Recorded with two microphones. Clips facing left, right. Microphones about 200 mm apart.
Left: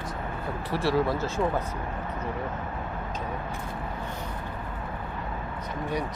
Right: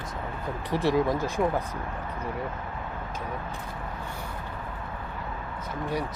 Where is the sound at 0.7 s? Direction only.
15° right (ahead or behind).